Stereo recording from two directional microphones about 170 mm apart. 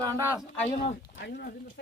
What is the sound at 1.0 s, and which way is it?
Speech, 70° left (ahead or behind).